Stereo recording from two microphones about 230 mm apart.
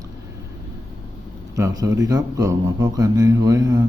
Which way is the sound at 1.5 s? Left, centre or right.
Centre.